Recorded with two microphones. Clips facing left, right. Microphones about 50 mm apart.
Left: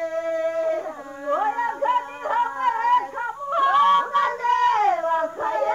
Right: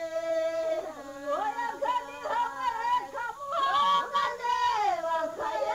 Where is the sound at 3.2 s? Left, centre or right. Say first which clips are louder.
Left 7 dB; left.